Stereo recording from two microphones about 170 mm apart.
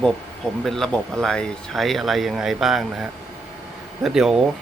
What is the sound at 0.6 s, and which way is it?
Speech, centre (ahead or behind).